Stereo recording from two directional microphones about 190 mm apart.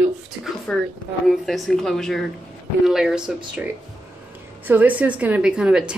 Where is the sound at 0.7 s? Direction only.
5° left (ahead or behind).